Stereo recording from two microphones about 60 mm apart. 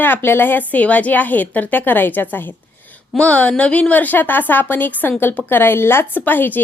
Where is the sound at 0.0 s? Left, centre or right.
Left.